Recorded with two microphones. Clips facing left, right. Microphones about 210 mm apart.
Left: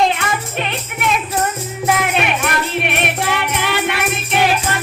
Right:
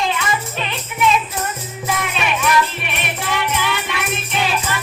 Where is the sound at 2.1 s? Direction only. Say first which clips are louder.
Even; 55° left (ahead or behind).